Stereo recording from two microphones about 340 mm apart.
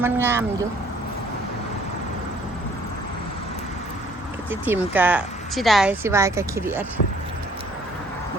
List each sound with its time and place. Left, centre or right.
0.0 s speech: centre
4.6 s a woman's voice: centre